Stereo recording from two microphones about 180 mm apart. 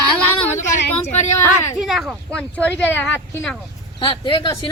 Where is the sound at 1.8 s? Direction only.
Centre (ahead or behind).